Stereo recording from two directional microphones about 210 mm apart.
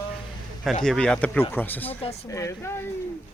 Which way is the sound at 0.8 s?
5° left (ahead or behind).